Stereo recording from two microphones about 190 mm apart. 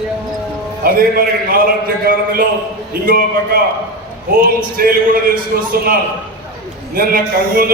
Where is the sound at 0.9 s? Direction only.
50° right (ahead or behind).